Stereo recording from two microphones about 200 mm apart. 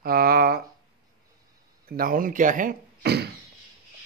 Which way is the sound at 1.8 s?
45° right (ahead or behind).